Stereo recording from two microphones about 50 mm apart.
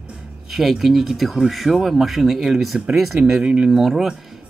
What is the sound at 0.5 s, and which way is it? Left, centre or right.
Speech, centre.